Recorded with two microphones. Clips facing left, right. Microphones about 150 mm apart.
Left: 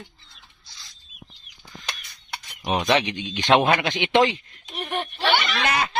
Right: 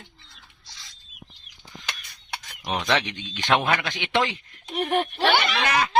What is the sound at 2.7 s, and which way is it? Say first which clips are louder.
A man's voice: left 4 dB; 15° left (ahead or behind).